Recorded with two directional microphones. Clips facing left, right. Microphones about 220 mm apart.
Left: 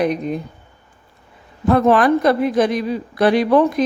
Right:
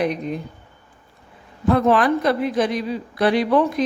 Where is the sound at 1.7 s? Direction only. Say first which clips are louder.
Left 3 dB; 50° left (ahead or behind).